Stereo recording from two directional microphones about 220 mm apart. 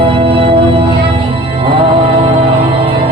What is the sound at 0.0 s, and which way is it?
Music, 25° right (ahead or behind).